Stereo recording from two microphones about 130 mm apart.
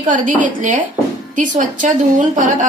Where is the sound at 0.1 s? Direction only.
80° right.